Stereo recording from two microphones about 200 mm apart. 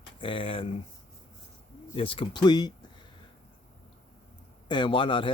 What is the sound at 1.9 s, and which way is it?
Speech, 25° left (ahead or behind).